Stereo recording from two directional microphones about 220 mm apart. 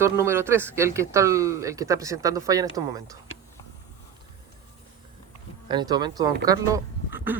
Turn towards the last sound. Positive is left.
turn(degrees=-10)  # may be behind; listen again after turning